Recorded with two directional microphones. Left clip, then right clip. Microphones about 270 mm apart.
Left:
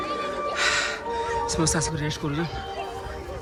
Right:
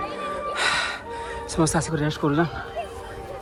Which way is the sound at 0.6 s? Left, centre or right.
Centre.